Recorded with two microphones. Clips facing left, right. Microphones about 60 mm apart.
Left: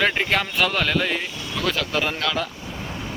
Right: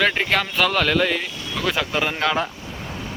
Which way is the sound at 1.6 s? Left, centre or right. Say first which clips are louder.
Right 1 dB; centre.